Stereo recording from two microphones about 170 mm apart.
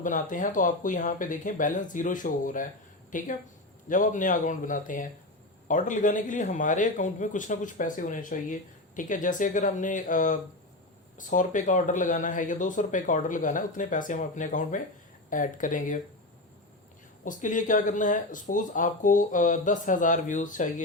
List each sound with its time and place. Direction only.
0.0 s speech: 50° left (ahead or behind)
17.2 s speech: 50° left (ahead or behind)